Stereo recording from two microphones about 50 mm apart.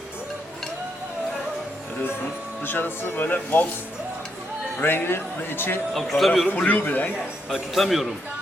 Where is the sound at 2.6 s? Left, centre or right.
Left.